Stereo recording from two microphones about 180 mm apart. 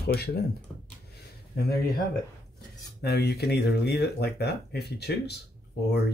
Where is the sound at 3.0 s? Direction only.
65° left (ahead or behind).